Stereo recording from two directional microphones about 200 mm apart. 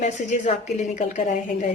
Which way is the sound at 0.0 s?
35° left (ahead or behind).